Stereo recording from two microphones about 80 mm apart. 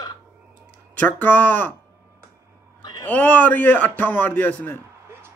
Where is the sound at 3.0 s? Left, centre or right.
Left.